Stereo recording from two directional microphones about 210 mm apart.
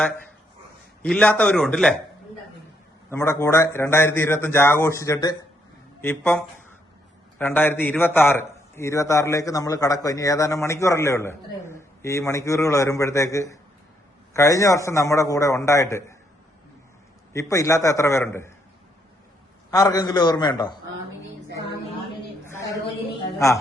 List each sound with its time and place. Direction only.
1.0 s a man's voice: 5° left (ahead or behind)
3.1 s a man's voice: 10° left (ahead or behind)
17.3 s a man's voice: 15° left (ahead or behind)
19.7 s a man's voice: 15° left (ahead or behind)
22.4 s a sound: 15° left (ahead or behind)